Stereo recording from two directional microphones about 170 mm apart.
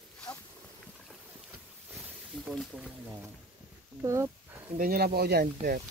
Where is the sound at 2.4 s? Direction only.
Centre (ahead or behind).